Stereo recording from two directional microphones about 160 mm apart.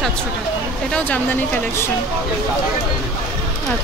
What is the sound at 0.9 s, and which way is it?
Speech, 10° left (ahead or behind).